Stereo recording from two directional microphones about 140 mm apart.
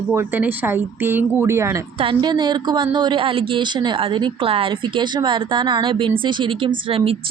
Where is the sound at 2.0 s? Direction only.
35° right (ahead or behind).